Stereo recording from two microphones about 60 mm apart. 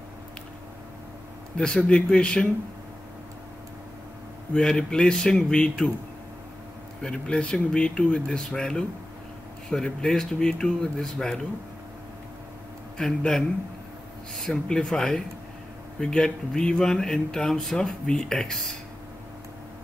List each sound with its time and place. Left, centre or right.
1.8 s speech: centre
4.6 s speech: centre
7.0 s speech: centre
9.8 s speech: centre
12.9 s speech: centre
14.4 s speech: centre